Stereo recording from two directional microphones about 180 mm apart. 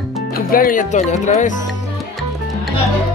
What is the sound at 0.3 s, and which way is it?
Speech, 50° left (ahead or behind).